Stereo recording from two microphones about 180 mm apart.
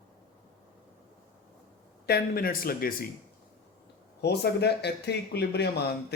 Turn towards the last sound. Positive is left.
turn(degrees=65)  # may be behind; listen again after turning